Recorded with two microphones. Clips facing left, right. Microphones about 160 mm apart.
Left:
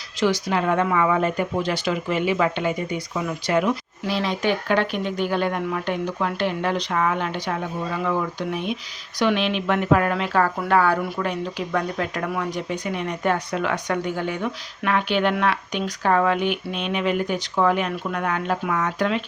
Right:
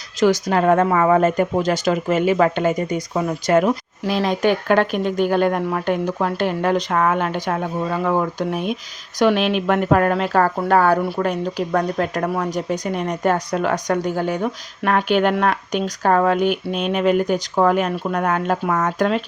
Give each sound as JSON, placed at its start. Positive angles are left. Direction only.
{"t": 0.2, "sound": "speech", "side_deg": -45}